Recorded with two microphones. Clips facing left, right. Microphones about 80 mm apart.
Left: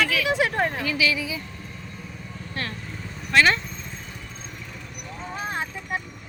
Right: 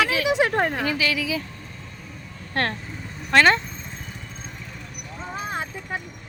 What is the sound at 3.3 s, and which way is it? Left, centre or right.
Speech, right.